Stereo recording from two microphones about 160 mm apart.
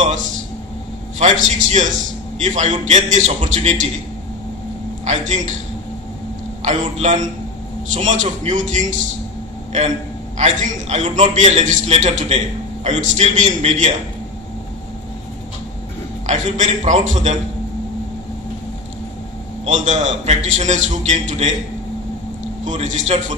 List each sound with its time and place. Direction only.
1.2 s a man's voice: 45° right (ahead or behind)
6.6 s a man's voice: 45° right (ahead or behind)
10.3 s a man's voice: 45° right (ahead or behind)
16.3 s a man's voice: 50° right (ahead or behind)
19.6 s a man's voice: 45° right (ahead or behind)
22.7 s a man's voice: 45° right (ahead or behind)